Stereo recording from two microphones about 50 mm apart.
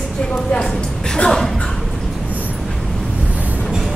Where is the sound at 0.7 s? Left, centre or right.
Centre.